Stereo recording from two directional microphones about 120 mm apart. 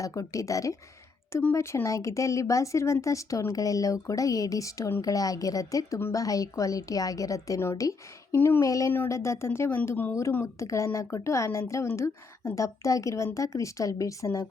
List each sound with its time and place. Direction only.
0.0 s speech: 25° left (ahead or behind)